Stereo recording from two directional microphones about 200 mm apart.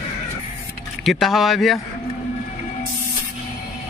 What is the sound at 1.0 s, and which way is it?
Speech, centre (ahead or behind).